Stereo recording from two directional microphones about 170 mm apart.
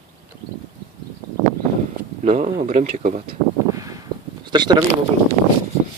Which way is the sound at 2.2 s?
45° right (ahead or behind).